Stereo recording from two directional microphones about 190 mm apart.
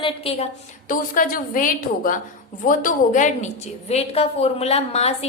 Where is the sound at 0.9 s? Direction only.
45° left (ahead or behind).